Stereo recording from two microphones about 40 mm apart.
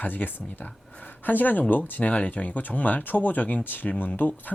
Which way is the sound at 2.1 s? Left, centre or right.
Left.